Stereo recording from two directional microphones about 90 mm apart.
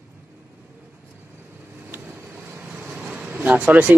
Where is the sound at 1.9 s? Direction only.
15° right (ahead or behind).